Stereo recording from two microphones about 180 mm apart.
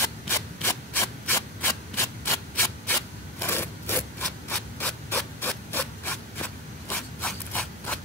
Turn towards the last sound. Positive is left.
turn(degrees=5)  # may be behind; listen again after turning